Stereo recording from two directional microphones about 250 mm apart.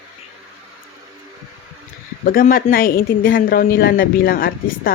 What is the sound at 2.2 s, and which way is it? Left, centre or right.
Speech, left.